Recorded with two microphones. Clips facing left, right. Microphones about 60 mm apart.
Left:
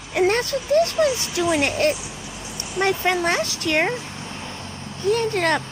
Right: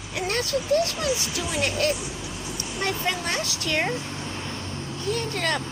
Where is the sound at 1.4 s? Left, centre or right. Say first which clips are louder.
Left 8 dB; left.